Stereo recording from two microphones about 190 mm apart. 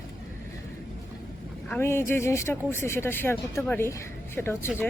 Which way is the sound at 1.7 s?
15° left (ahead or behind).